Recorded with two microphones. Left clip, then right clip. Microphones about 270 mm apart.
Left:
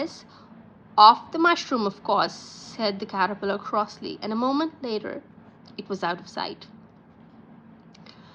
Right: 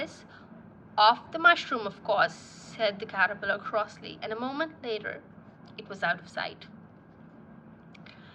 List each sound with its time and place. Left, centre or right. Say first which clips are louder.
0.9 s a woman's voice: left 8 dB; centre